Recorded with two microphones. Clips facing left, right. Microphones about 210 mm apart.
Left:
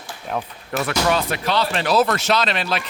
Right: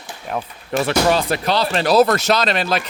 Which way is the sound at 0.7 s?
30° right (ahead or behind).